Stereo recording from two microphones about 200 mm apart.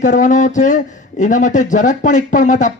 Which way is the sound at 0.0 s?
40° left (ahead or behind).